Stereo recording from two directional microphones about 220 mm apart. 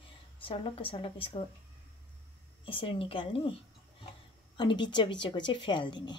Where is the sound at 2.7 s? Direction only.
25° left (ahead or behind).